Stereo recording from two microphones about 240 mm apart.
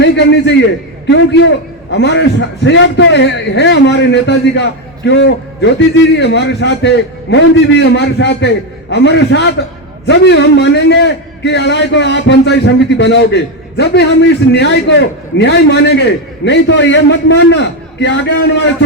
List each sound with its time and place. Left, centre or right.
0.0 s a man's voice: left